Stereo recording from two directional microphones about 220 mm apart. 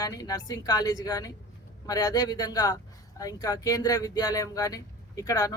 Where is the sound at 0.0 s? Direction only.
15° left (ahead or behind).